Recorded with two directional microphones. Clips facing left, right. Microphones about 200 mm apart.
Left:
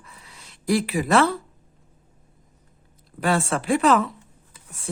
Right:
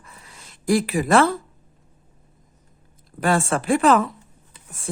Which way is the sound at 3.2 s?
45° right (ahead or behind).